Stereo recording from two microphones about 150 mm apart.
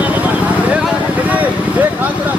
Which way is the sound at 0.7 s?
5° right (ahead or behind).